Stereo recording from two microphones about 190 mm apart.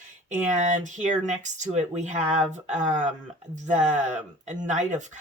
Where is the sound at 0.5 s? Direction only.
40° right (ahead or behind).